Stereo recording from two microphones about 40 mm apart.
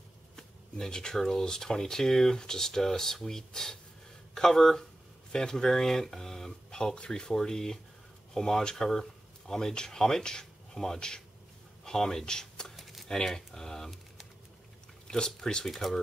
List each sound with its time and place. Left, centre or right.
0.4 s speech: centre
6.7 s speech: centre
12.7 s a sound: centre
15.0 s speech: centre
15.7 s speech: centre